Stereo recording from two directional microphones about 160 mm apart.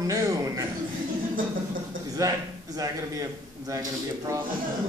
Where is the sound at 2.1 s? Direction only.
20° right (ahead or behind).